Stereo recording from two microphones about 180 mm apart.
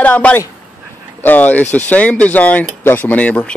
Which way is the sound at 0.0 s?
10° left (ahead or behind).